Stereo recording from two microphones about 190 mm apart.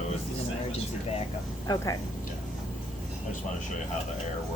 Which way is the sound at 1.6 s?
20° left (ahead or behind).